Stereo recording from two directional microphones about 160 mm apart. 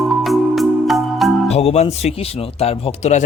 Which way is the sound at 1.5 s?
40° left (ahead or behind).